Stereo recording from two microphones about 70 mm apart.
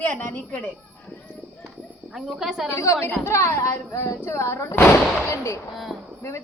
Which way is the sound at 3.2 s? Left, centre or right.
Left.